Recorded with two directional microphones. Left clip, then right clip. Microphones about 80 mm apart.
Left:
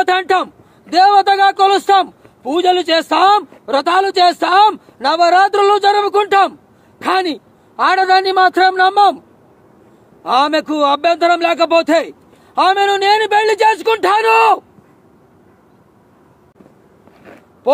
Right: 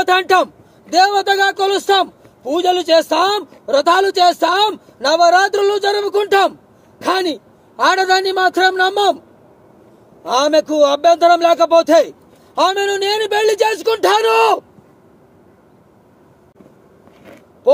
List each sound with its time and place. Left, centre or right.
0.0 s a man's voice: left
10.2 s a man's voice: left